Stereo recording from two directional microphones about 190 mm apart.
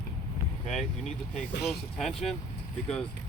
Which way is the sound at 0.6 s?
Centre (ahead or behind).